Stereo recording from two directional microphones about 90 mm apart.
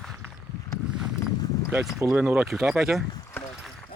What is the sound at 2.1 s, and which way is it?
Speech, 20° right (ahead or behind).